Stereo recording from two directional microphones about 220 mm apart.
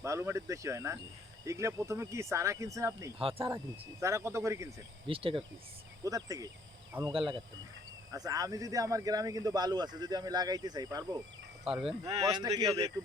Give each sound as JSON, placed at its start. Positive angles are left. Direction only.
{"t": 0.0, "sound": "speech", "side_deg": -10}
{"t": 3.2, "sound": "speech", "side_deg": -25}
{"t": 4.0, "sound": "speech", "side_deg": -15}
{"t": 5.0, "sound": "speech", "side_deg": -25}
{"t": 11.6, "sound": "speech", "side_deg": 0}
{"t": 12.2, "sound": "speech", "side_deg": -15}